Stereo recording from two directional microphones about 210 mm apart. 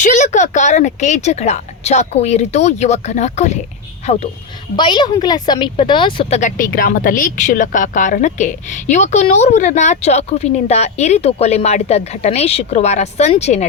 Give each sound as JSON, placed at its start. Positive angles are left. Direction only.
{"t": 0.0, "sound": "speech", "side_deg": 35}
{"t": 4.8, "sound": "speech", "side_deg": 20}
{"t": 6.4, "sound": "speech", "side_deg": 40}